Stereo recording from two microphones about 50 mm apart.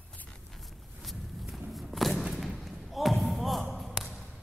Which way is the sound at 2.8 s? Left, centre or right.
Centre.